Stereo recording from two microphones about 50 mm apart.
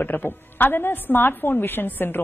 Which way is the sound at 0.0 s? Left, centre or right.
Left.